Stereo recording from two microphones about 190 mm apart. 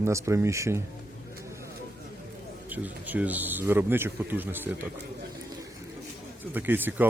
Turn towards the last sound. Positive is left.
turn(degrees=-10)  # may be behind; listen again after turning